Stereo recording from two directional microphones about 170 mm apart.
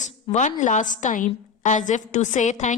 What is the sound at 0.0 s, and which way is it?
A woman's voice, 45° left (ahead or behind).